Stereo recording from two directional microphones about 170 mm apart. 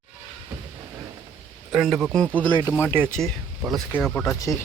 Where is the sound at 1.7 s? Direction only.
Centre (ahead or behind).